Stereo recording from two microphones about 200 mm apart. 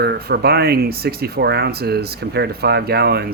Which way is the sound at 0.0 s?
55° right (ahead or behind).